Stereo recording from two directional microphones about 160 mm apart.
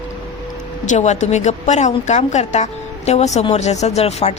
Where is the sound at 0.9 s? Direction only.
45° left (ahead or behind).